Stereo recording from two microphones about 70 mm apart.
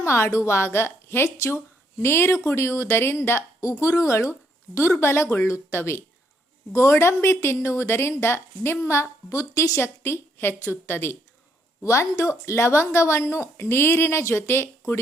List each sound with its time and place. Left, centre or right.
0.0 s a woman's voice: left
9.3 s a woman's voice: left
11.8 s a woman's voice: left